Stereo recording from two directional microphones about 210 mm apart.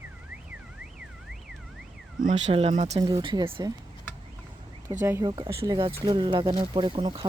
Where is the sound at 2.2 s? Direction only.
30° right (ahead or behind).